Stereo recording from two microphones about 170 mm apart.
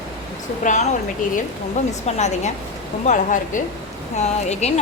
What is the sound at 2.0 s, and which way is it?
A woman's voice, 40° left (ahead or behind).